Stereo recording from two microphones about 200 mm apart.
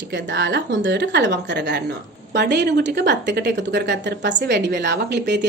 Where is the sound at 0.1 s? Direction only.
65° right (ahead or behind).